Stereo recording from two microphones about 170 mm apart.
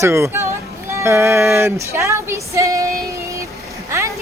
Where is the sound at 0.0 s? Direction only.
15° right (ahead or behind).